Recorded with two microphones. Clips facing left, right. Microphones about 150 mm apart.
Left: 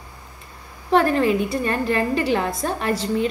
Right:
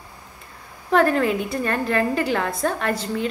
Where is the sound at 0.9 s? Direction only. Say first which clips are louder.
Left 1 dB; centre (ahead or behind).